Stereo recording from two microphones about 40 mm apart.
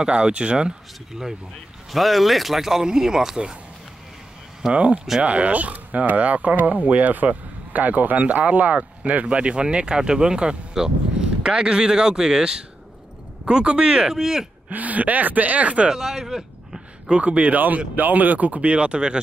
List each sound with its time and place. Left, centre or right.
0.0 s speech: right
1.9 s speech: centre
4.7 s speech: right
14.1 s speech: centre
14.7 s speech: right
15.9 s speech: centre
17.1 s speech: right
17.6 s speech: right